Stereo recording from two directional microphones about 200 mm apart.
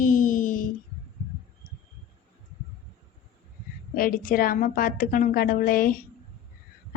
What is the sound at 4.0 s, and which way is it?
A woman's voice, 45° left (ahead or behind).